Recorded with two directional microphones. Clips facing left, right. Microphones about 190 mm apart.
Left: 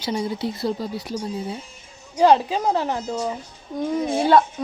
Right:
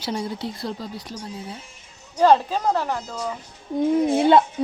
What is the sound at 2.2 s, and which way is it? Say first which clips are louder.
Speech: left 1 dB; 10° left (ahead or behind).